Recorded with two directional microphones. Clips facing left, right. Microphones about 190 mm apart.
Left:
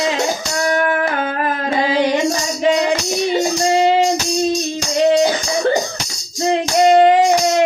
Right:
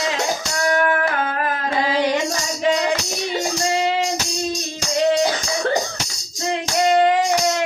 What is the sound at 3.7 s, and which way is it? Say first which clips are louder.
Music: left 8 dB; 25° left (ahead or behind).